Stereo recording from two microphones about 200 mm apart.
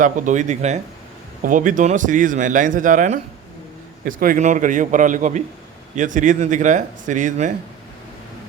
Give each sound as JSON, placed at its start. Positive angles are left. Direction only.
{"t": 0.0, "sound": "speech", "side_deg": -40}